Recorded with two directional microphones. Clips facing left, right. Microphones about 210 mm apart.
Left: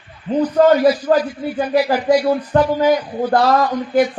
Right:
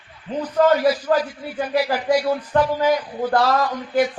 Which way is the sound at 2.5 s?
40° left (ahead or behind).